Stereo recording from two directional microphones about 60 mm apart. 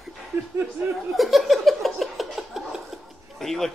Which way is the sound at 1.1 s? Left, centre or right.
Centre.